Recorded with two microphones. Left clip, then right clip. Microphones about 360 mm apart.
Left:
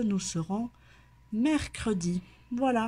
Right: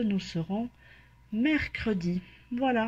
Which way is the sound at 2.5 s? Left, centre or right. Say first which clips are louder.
Even; centre.